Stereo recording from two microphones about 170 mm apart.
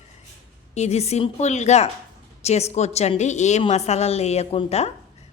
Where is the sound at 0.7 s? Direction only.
40° left (ahead or behind).